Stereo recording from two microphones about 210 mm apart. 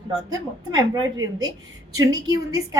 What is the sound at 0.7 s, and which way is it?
A woman's voice, 20° right (ahead or behind).